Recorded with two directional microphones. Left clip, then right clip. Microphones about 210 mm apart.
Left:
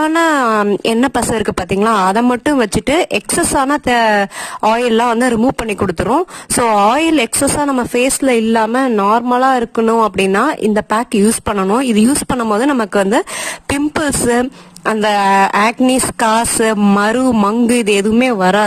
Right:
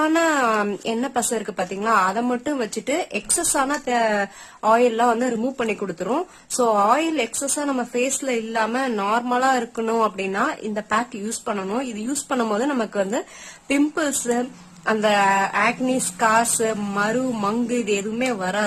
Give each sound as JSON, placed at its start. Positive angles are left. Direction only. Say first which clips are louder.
{"t": 0.0, "sound": "a woman's voice", "louder": "left 6 dB", "side_deg": 45}
{"t": 6.7, "sound": "speech", "louder": "left 9 dB", "side_deg": 45}
{"t": 10.2, "sound": "a woman's voice", "louder": "left 10 dB", "side_deg": 45}